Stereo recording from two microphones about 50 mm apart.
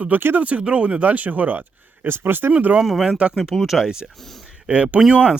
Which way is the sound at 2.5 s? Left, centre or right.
Right.